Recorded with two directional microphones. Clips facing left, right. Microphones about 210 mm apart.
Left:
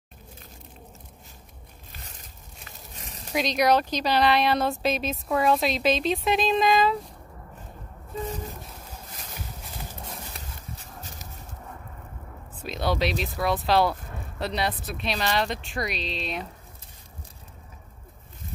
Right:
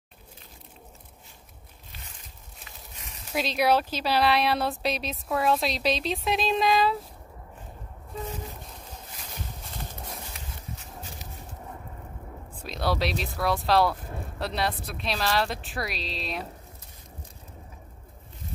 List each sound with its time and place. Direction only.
1.9 s a sound: 45° left (ahead or behind)
3.3 s speech: 5° right (ahead or behind)
9.8 s horse: centre (ahead or behind)
12.5 s speech: centre (ahead or behind)